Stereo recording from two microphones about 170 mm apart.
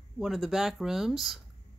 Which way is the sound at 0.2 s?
Centre (ahead or behind).